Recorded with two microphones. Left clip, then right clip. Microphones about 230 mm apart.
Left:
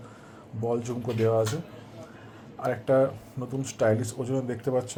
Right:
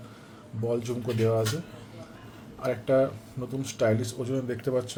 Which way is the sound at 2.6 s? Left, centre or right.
Centre.